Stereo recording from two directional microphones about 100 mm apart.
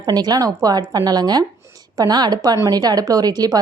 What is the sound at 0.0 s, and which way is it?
Speech, 40° right (ahead or behind).